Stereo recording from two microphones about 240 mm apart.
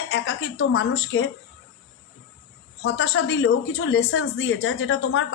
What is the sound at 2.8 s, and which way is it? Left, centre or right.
A woman's voice, left.